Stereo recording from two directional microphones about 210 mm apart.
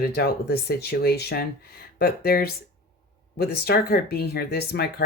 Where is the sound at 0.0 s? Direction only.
50° left (ahead or behind).